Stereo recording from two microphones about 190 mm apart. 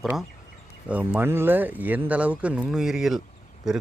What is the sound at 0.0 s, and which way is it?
Speech, centre (ahead or behind).